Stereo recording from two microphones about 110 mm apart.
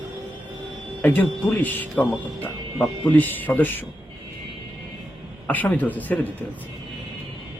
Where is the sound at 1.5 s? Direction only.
15° left (ahead or behind).